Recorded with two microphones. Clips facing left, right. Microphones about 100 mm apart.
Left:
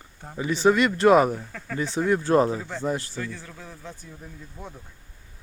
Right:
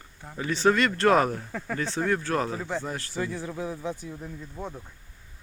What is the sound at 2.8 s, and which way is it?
Speech, 20° left (ahead or behind).